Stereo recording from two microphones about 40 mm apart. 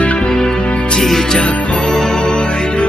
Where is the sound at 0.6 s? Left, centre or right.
Left.